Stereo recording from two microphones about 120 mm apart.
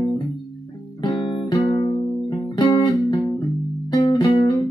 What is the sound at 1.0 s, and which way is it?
Guitar, 25° left (ahead or behind).